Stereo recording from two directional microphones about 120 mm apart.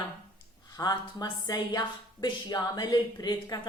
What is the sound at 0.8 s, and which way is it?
A woman's voice, 35° left (ahead or behind).